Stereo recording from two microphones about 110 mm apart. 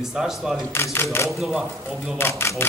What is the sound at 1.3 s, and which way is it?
Speech, centre (ahead or behind).